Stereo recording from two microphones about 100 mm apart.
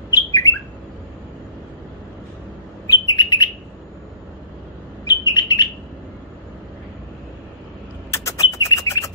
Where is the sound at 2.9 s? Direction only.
40° left (ahead or behind).